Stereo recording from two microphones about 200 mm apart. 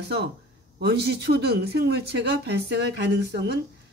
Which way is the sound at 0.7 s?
55° right (ahead or behind).